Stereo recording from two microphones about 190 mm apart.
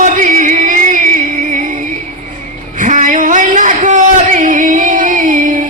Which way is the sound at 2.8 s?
40° right (ahead or behind).